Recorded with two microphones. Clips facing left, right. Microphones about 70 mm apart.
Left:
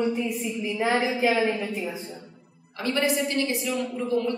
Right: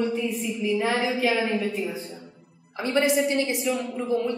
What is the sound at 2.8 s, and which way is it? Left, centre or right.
A woman's voice, right.